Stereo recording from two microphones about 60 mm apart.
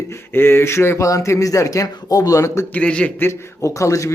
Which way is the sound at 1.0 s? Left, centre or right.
Left.